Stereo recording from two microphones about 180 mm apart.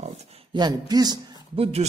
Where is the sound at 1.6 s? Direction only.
35° right (ahead or behind).